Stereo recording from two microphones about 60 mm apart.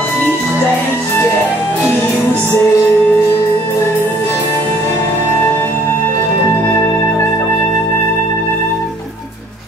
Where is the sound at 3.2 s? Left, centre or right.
Left.